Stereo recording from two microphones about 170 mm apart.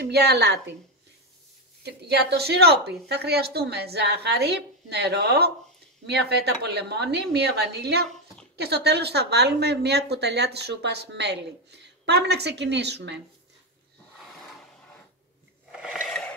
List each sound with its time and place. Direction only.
0.0 s a woman's voice: 75° right (ahead or behind)
1.8 s a woman's voice: 75° right (ahead or behind)
15.8 s a sound: centre (ahead or behind)